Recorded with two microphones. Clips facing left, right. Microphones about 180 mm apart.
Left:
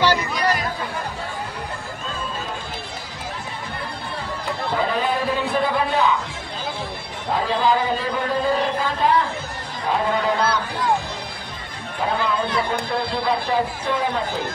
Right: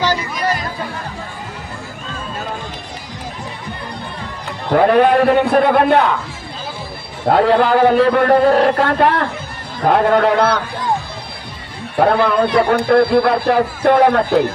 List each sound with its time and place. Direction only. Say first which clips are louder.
4.7 s a man's voice: right 13 dB; 65° right (ahead or behind)
7.2 s a man's voice: right 8 dB; 65° right (ahead or behind)
12.0 s a man's voice: right 9 dB; 65° right (ahead or behind)